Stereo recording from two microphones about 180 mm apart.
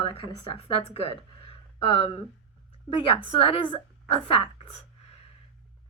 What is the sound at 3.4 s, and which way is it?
Speech, 30° left (ahead or behind).